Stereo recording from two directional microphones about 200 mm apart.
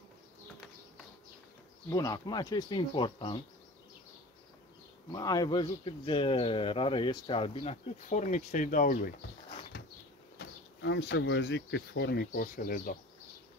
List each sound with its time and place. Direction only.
1.9 s speech: 15° left (ahead or behind)
5.1 s speech: 20° left (ahead or behind); by 9.1 s 45° left (ahead or behind)
10.4 s speech: 65° left (ahead or behind); by 12.9 s 45° left (ahead or behind)